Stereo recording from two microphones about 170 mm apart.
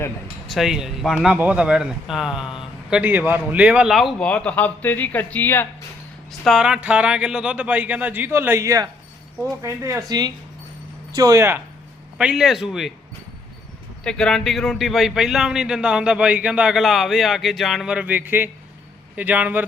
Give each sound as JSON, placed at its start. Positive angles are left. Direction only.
{"t": 0.4, "sound": "a man's voice", "side_deg": 0}
{"t": 6.4, "sound": "a man's voice", "side_deg": -5}
{"t": 12.1, "sound": "a man's voice", "side_deg": -5}
{"t": 14.0, "sound": "a man's voice", "side_deg": 5}